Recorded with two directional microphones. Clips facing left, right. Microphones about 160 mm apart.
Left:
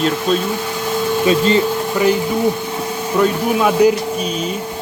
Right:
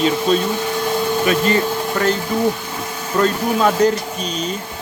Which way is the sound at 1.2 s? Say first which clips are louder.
Left 4 dB; 25° left (ahead or behind).